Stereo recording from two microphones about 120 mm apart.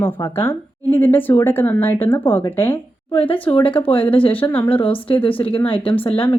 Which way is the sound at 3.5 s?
50° left (ahead or behind).